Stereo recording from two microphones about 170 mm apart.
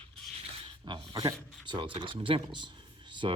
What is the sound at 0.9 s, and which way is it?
Speech, 25° right (ahead or behind).